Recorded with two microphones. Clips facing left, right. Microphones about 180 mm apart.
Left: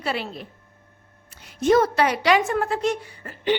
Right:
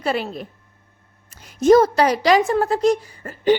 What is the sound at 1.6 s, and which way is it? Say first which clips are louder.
A woman's voice: right 5 dB; 40° right (ahead or behind).